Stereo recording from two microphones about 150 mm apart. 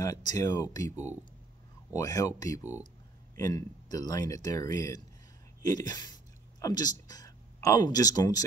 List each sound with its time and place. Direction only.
0.0 s speech: 25° left (ahead or behind)
2.0 s speech: 25° left (ahead or behind)